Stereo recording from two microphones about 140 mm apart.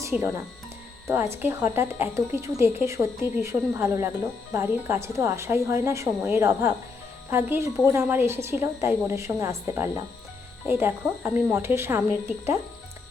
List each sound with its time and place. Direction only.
0.0 s a woman's voice: 20° right (ahead or behind)